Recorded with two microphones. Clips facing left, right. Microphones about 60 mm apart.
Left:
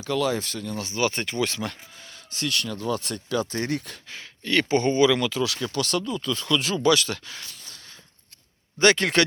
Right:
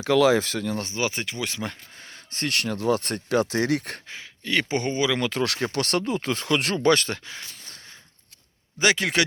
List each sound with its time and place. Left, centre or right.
0.0 s speech: right
1.1 s speech: centre
2.0 s a sound: right
2.5 s speech: right
4.1 s speech: centre
5.3 s speech: right
6.8 s speech: right
7.3 s a sound: right
8.8 s speech: centre